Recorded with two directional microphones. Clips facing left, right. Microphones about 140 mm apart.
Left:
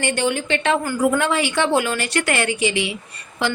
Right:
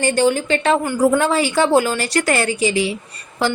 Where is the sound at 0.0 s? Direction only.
35° right (ahead or behind).